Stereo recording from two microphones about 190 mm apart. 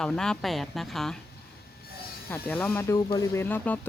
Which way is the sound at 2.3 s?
10° left (ahead or behind).